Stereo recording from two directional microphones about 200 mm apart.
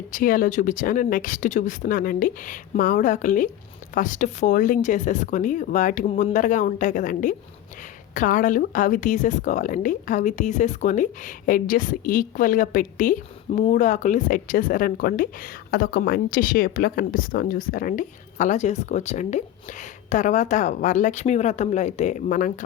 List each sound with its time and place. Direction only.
0.1 s speech: 45° left (ahead or behind)